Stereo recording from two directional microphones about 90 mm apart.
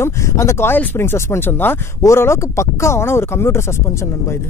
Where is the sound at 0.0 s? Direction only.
30° left (ahead or behind).